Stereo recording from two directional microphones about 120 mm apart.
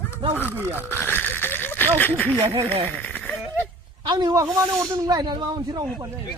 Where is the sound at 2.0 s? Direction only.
15° left (ahead or behind).